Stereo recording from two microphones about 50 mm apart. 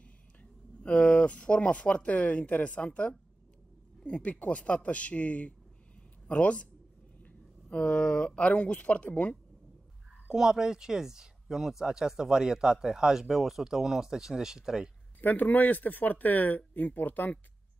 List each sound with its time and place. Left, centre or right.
0.0 s speech: left
10.2 s speech: centre
15.1 s speech: left